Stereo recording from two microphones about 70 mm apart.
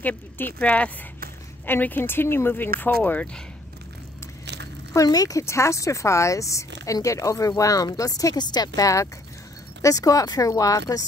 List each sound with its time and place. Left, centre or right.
0.0 s speech: left
5.0 s speech: left
5.4 s speech: left